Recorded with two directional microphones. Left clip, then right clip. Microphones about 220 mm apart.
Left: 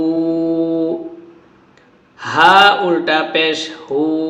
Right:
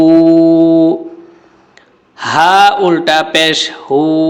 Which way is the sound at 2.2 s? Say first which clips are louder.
Right 2 dB; 50° right (ahead or behind).